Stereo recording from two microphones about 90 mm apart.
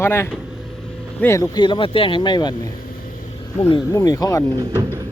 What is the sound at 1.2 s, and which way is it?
Speech, 15° left (ahead or behind).